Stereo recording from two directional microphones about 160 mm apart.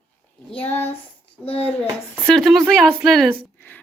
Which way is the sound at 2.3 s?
Centre (ahead or behind).